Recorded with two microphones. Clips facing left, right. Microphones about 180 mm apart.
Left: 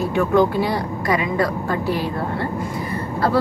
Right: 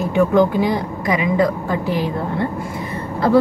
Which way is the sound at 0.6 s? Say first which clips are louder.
Right 2 dB; 15° right (ahead or behind).